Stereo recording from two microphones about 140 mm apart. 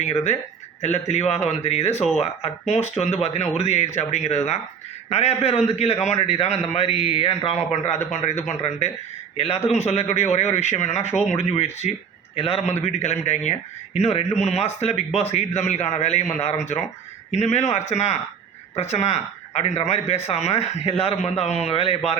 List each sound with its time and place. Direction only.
0.0 s a man's voice: 55° left (ahead or behind)
7.9 s a man's voice: 55° left (ahead or behind)